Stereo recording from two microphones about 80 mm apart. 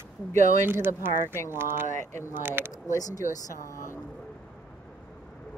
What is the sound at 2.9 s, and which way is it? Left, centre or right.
Speech, left.